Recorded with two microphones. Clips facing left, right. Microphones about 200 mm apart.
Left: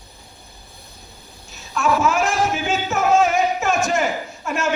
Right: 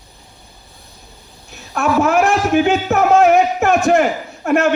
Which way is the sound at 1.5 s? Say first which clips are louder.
Right 4 dB; 60° right (ahead or behind).